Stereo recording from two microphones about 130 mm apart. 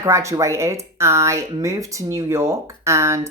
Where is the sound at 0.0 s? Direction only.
25° right (ahead or behind).